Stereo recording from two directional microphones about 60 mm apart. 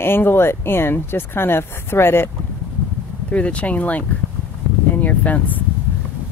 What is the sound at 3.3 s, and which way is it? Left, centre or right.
Speech, left.